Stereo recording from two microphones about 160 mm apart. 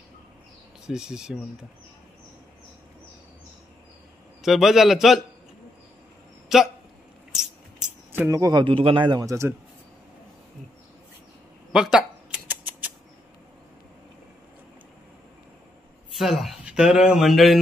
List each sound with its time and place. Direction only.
0.8 s speech: 5° right (ahead or behind)
4.4 s speech: centre (ahead or behind)
6.5 s speech: centre (ahead or behind)
8.1 s a man's voice: 15° right (ahead or behind)
11.7 s scissors: 5° right (ahead or behind)
16.1 s speech: centre (ahead or behind)